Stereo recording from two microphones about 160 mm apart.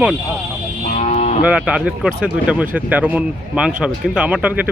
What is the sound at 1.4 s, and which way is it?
Speech, 10° right (ahead or behind).